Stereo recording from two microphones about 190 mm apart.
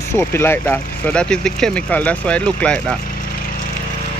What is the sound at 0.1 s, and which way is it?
Speech, 10° left (ahead or behind).